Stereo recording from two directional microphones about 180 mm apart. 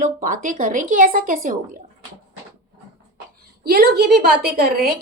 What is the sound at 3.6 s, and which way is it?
A woman's voice, 60° right (ahead or behind).